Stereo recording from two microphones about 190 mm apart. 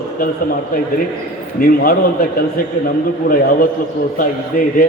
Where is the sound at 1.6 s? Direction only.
50° left (ahead or behind).